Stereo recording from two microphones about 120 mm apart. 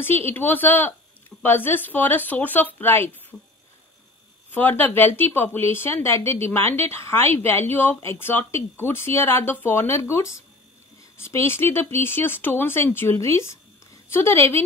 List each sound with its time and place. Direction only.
0.0 s a woman's voice: 20° left (ahead or behind)
4.5 s a woman's voice: 15° left (ahead or behind)